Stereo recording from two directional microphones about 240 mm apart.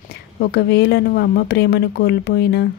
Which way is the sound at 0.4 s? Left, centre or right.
Left.